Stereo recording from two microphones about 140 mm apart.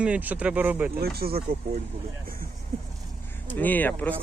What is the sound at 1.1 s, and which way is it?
Speech, 90° right.